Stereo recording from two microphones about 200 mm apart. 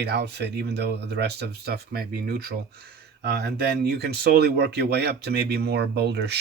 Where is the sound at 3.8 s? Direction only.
55° right (ahead or behind).